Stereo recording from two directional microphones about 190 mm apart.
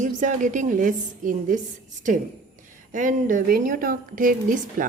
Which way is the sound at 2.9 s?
45° right (ahead or behind).